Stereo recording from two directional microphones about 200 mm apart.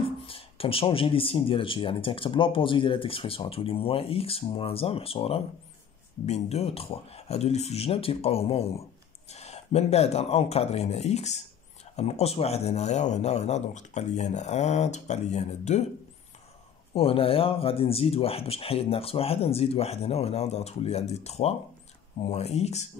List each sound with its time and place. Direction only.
0.0 s speech: 30° left (ahead or behind)
16.9 s speech: 30° left (ahead or behind)